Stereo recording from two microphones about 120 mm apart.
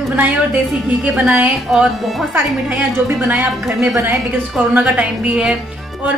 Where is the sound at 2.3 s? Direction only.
10° right (ahead or behind).